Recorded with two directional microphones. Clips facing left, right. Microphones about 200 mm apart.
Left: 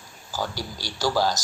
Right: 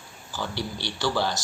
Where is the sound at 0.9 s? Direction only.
40° left (ahead or behind).